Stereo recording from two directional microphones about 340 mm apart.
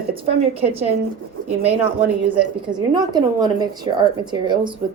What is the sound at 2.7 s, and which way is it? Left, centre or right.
A woman's voice, centre.